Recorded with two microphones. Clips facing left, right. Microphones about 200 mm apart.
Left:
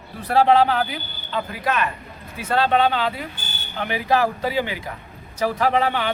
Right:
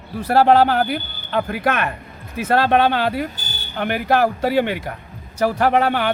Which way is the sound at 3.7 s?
55° right (ahead or behind).